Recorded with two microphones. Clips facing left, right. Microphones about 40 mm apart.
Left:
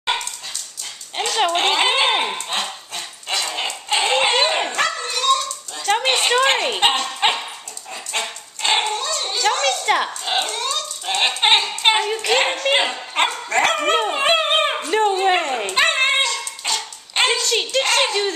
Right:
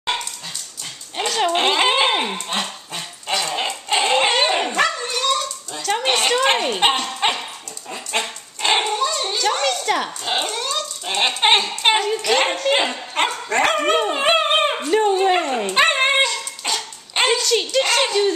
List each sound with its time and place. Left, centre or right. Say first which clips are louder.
1.5 s dog: right 1 dB; centre
5.8 s a sound: left 3 dB; left
6.0 s a sound: right 1 dB; centre
6.8 s dog: even; centre
7.1 s dog: left 1 dB; centre
7.9 s dog: right 2 dB; centre
9.5 s a sound: left 2 dB; centre
9.8 s dog: left 2 dB; centre
10.2 s a sound: left 1 dB; centre
12.1 s a woman's voice: right 1 dB; left
12.4 s speech: left 1 dB; centre
13.3 s dog: even; centre
15.6 s dog: right 1 dB; centre
17.5 s speech: right 1 dB; centre